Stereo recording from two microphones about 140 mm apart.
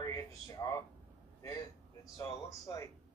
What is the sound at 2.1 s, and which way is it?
Speech, 30° left (ahead or behind).